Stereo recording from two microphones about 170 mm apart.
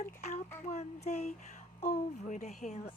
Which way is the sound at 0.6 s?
40° left (ahead or behind).